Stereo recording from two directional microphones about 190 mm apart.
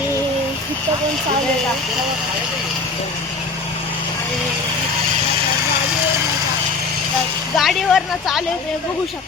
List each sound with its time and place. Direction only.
7.5 s speech: centre (ahead or behind)